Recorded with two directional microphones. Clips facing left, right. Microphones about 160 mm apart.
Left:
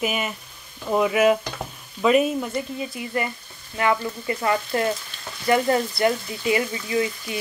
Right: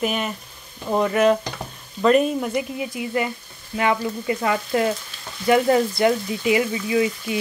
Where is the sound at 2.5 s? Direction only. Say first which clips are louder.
Right 3 dB; 15° right (ahead or behind).